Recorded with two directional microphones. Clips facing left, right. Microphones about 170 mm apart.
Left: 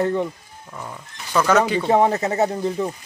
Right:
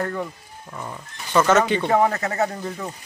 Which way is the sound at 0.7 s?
Centre (ahead or behind).